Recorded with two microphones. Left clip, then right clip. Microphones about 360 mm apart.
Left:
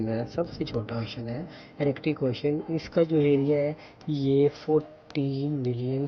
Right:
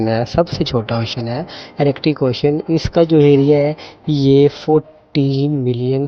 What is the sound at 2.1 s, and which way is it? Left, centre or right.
Speech, right.